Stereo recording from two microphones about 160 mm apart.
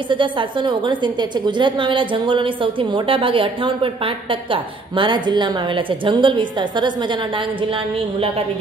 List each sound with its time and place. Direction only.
0.1 s a woman's voice: 30° right (ahead or behind)